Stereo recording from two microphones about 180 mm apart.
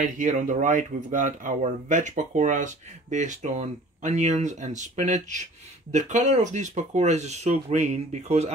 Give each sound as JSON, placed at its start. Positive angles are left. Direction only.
{"t": 0.0, "sound": "speech", "side_deg": -45}